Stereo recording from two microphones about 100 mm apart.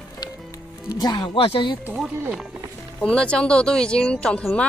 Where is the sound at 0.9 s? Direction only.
45° left (ahead or behind).